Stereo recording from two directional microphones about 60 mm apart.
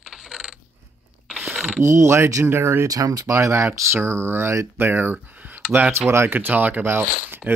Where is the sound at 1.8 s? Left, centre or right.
Right.